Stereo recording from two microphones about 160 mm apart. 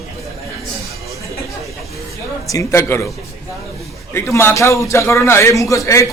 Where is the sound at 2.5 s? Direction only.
20° left (ahead or behind).